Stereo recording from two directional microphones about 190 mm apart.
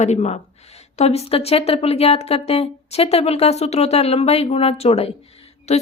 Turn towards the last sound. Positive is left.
turn(degrees=35)  # may be behind; listen again after turning